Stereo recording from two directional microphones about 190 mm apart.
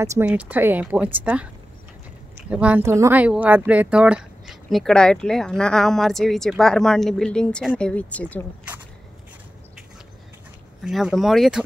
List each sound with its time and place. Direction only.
0.0 s speech: 15° right (ahead or behind); by 8.5 s 10° left (ahead or behind)
10.8 s speech: centre (ahead or behind)